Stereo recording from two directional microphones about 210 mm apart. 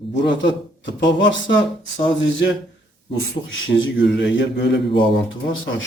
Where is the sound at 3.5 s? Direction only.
65° left (ahead or behind).